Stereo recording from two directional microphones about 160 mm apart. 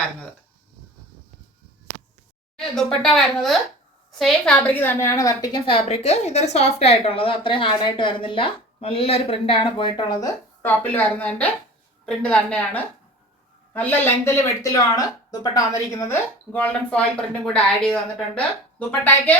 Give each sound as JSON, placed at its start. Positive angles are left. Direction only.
{"t": 2.6, "sound": "a woman's voice", "side_deg": 5}
{"t": 16.5, "sound": "speech", "side_deg": 5}